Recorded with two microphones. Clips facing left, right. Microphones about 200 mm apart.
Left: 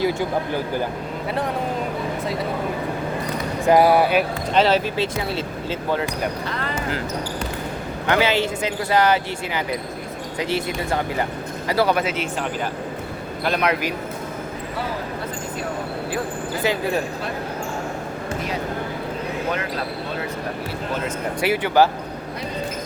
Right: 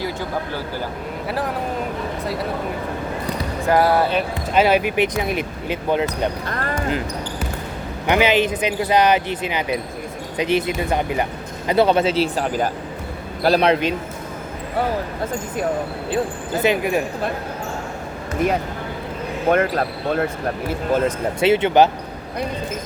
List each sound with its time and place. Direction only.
0.0 s speech: 15° left (ahead or behind)
3.7 s speech: 15° left (ahead or behind)
4.5 s speech: 10° right (ahead or behind)
6.5 s basketball bounce: 50° right (ahead or behind)
8.0 s speech: 20° right (ahead or behind)
16.6 s speech: 15° right (ahead or behind)
19.5 s speech: 55° right (ahead or behind)
21.4 s speech: 25° right (ahead or behind)